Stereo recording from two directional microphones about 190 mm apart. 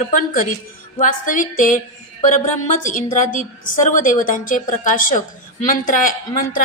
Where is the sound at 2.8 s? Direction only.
40° left (ahead or behind).